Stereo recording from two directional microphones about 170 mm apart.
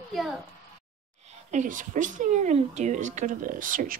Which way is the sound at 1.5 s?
50° right (ahead or behind).